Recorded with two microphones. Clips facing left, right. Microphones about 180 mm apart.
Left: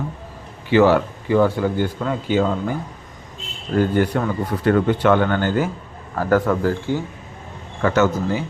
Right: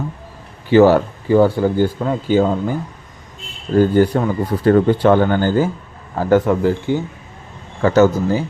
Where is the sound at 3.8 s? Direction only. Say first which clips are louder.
Right 5 dB; 35° right (ahead or behind).